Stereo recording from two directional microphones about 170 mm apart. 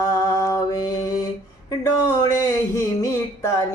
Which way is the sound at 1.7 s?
20° left (ahead or behind).